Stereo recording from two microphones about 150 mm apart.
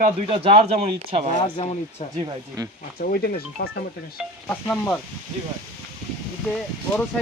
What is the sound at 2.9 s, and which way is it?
Speech, 90° left.